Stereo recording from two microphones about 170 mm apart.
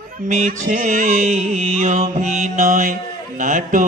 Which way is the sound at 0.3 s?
45° right (ahead or behind).